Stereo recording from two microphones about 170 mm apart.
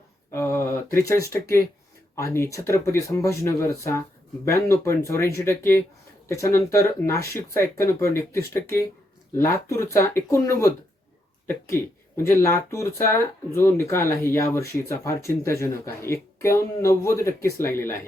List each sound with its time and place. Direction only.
0.3 s speech: 15° left (ahead or behind)